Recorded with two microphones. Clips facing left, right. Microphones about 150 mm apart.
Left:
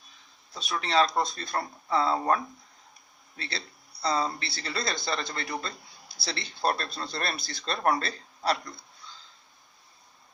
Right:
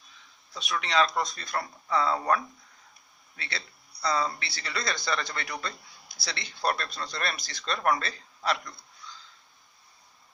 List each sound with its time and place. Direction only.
0.5 s speech: 35° left (ahead or behind)